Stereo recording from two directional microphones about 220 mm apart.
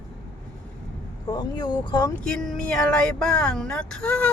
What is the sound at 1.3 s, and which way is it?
Speech, 20° left (ahead or behind).